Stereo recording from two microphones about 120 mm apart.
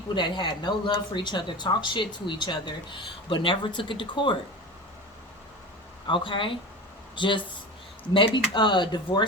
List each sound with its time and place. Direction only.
0.1 s speech: 40° left (ahead or behind)
6.1 s speech: 45° left (ahead or behind)